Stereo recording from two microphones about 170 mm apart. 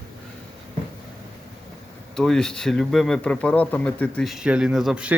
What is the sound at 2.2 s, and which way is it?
Speech, 5° left (ahead or behind).